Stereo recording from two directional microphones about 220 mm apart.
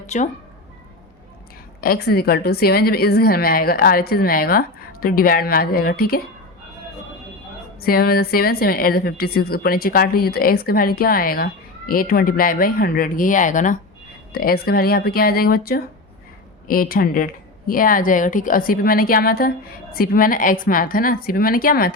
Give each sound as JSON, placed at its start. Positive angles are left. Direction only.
{"t": 0.1, "sound": "speech", "side_deg": 30}
{"t": 1.8, "sound": "a woman's voice", "side_deg": 45}
{"t": 7.8, "sound": "a woman's voice", "side_deg": 45}